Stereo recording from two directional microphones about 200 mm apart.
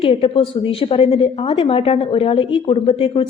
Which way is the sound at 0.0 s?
30° left (ahead or behind).